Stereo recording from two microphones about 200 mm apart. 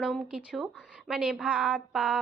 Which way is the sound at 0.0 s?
5° right (ahead or behind).